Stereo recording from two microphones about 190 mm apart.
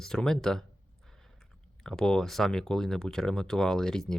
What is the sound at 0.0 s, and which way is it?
Speech, 5° left (ahead or behind).